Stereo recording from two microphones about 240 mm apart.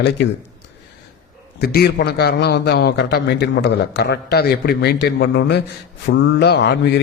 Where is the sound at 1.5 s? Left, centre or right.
Left.